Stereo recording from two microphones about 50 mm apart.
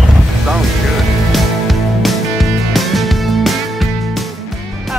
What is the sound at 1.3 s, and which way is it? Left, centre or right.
Music, centre.